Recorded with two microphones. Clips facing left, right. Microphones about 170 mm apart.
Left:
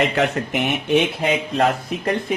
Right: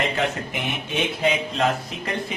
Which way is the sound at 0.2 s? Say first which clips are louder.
Left 5 dB; 65° left (ahead or behind).